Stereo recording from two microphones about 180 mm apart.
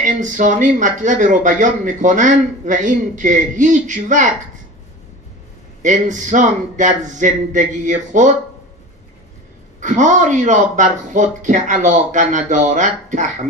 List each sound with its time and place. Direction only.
0.0 s speech: 45° right (ahead or behind)
5.8 s speech: 45° right (ahead or behind)
9.8 s speech: 45° right (ahead or behind)